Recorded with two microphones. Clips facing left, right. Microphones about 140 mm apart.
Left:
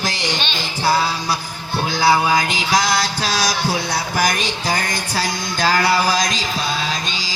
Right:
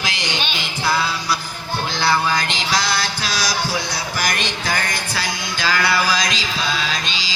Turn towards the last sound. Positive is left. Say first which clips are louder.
# left 2 dB
turn(degrees=45)  # may be behind; listen again after turning